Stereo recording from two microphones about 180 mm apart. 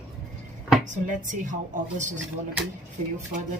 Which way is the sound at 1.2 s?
45° right (ahead or behind).